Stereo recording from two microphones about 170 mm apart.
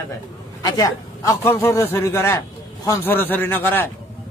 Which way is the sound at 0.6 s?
20° left (ahead or behind).